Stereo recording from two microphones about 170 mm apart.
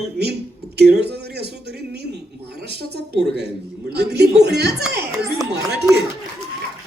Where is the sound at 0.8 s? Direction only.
75° right (ahead or behind).